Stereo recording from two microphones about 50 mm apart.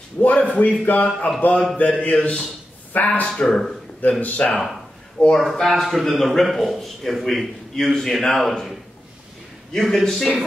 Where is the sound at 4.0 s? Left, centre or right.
Left.